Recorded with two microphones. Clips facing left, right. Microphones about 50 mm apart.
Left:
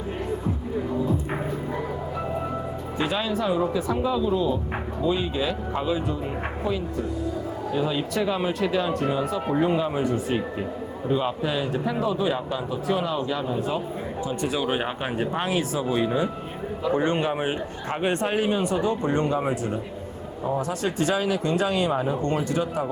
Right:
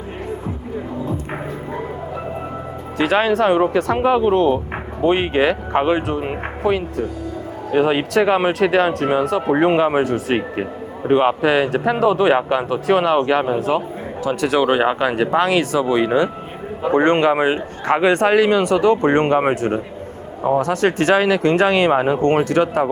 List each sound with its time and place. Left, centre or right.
3.0 s speech: right
14.3 s a man's voice: right